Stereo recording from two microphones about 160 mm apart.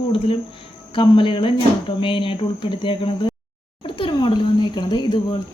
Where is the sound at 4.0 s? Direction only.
30° left (ahead or behind).